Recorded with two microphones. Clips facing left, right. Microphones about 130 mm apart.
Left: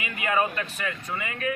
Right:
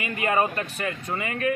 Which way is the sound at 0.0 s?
40° right (ahead or behind).